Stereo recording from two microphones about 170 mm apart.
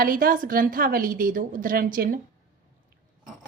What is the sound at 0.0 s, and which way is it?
A woman's voice, 55° right (ahead or behind).